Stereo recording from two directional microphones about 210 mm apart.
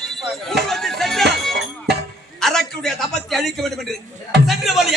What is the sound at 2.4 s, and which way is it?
A man's voice, centre (ahead or behind).